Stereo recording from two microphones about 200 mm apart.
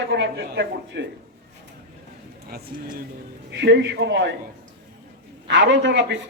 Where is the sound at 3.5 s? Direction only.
60° right (ahead or behind).